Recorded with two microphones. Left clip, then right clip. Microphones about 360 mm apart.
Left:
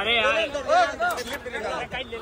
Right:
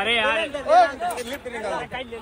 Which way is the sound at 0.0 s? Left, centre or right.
Centre.